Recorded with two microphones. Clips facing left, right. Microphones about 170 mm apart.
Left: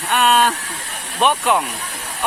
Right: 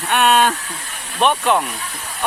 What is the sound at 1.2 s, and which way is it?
Speech, 10° left (ahead or behind).